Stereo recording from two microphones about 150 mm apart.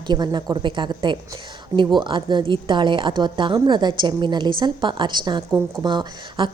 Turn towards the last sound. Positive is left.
turn(degrees=-30)  # may be behind; listen again after turning